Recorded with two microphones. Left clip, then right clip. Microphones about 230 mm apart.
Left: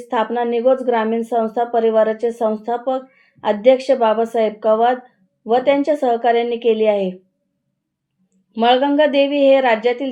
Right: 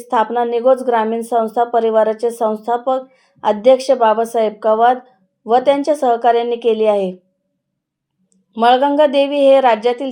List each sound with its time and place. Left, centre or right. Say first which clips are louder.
0.1 s a woman's voice: right 3 dB; right
8.5 s a woman's voice: right 3 dB; right